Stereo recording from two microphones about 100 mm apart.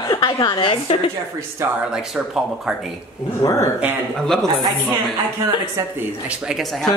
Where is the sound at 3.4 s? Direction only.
30° left (ahead or behind).